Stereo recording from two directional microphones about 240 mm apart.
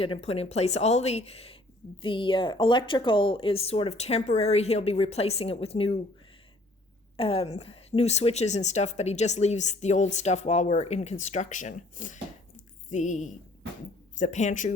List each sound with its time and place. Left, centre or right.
0.0 s a woman's voice: left
7.2 s a woman's voice: left